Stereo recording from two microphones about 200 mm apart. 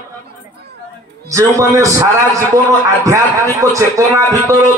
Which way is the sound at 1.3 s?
15° right (ahead or behind).